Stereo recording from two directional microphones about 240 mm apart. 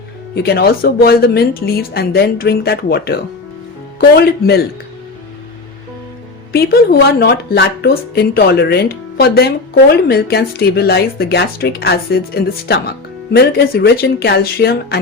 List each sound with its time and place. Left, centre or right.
0.3 s speech: left
6.5 s speech: left